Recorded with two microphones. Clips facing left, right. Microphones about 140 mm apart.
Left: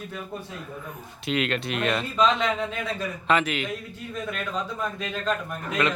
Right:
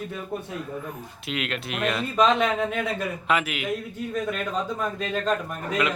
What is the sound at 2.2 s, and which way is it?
Speech, 55° right (ahead or behind).